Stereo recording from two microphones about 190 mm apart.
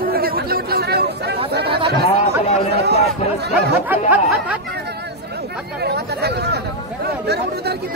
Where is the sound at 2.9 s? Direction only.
35° left (ahead or behind).